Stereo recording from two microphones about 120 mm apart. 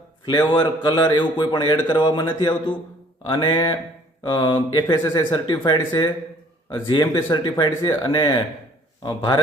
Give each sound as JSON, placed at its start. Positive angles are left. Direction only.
{"t": 0.3, "sound": "a man's voice", "side_deg": 40}